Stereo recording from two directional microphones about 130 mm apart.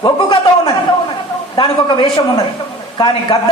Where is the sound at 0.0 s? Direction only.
30° left (ahead or behind).